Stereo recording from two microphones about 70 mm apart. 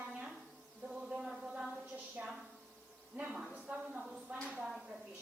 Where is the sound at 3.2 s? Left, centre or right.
Centre.